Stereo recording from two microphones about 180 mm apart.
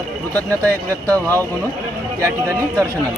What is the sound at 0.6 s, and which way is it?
Speech, 10° left (ahead or behind).